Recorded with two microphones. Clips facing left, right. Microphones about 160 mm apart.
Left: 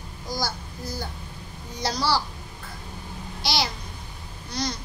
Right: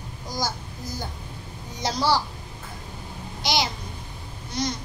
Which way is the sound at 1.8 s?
20° right (ahead or behind).